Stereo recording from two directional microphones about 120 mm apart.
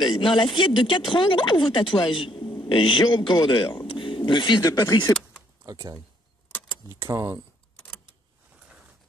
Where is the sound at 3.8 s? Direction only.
45° left (ahead or behind).